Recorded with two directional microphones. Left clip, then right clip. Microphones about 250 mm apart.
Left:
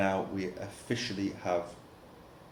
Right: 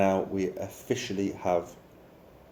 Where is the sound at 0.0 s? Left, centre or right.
Right.